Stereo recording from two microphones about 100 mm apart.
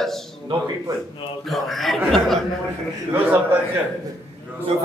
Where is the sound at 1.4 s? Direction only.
Centre (ahead or behind).